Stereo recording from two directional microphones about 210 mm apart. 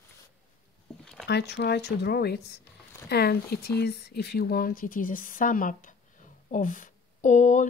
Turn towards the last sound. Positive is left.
turn(degrees=35)  # may be behind; listen again after turning